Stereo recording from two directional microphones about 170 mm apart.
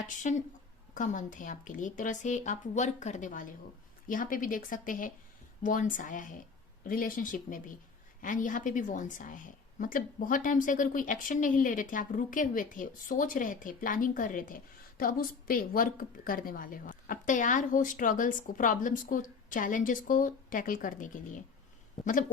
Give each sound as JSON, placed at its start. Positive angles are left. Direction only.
{"t": 0.2, "sound": "a woman's voice", "side_deg": 45}